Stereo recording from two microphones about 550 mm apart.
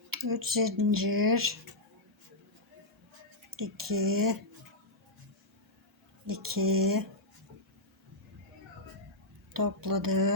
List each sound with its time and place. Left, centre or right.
0.1 s speech: right
3.5 s speech: right
6.2 s speech: right
9.5 s speech: right